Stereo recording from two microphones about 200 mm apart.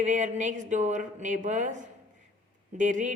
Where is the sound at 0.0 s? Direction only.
40° right (ahead or behind).